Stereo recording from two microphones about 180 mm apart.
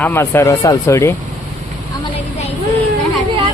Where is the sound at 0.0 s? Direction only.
15° left (ahead or behind).